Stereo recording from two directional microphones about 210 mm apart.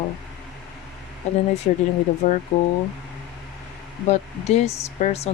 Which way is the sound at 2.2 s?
35° left (ahead or behind).